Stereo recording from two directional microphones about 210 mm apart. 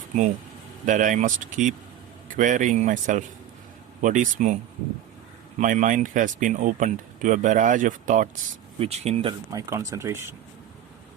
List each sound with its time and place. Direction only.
0.1 s speech: 35° right (ahead or behind)
5.5 s speech: 35° right (ahead or behind)
9.5 s speech: 15° right (ahead or behind)